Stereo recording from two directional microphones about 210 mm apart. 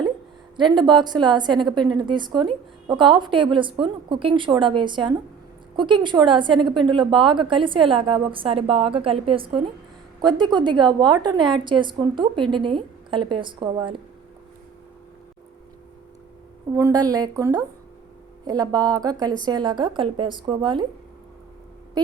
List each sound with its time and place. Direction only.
0.5 s a woman's voice: 20° right (ahead or behind)
16.7 s a woman's voice: 15° right (ahead or behind)